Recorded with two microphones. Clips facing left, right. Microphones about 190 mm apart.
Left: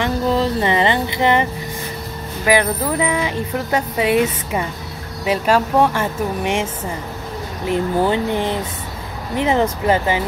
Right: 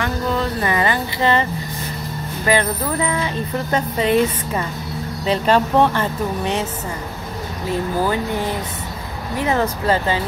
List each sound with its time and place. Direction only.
0.0 s a sound: 25° left (ahead or behind)
2.4 s speech: 10° left (ahead or behind)
7.6 s speech: 20° left (ahead or behind)